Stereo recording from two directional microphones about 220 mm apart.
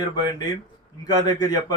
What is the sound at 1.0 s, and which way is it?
Speech, 15° left (ahead or behind).